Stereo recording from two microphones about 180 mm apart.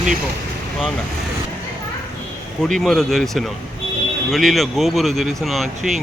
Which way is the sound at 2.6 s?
Centre (ahead or behind).